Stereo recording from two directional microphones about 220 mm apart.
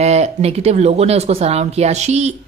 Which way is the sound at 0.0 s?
30° right (ahead or behind).